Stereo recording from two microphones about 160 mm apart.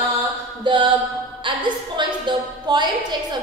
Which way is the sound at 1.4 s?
30° right (ahead or behind).